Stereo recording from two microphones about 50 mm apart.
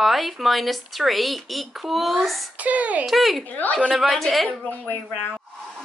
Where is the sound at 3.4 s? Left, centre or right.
Left.